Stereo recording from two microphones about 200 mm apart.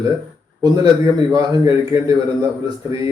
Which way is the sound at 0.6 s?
20° right (ahead or behind).